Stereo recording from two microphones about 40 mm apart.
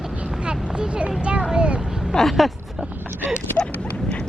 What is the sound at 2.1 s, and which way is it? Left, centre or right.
Vehicle, centre.